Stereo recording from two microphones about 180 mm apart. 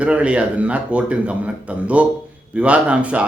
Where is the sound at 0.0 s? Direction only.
5° right (ahead or behind).